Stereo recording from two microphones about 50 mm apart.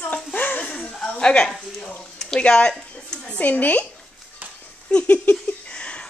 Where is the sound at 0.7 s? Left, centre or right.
Centre.